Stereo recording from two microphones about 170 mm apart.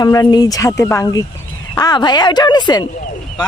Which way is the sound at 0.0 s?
20° left (ahead or behind).